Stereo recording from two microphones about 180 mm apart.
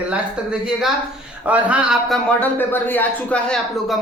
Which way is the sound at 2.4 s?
10° left (ahead or behind).